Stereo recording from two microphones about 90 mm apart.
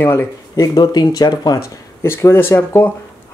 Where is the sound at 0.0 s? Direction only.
25° left (ahead or behind).